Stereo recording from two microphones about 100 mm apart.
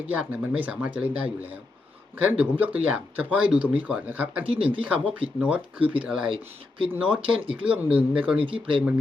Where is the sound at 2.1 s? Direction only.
15° right (ahead or behind).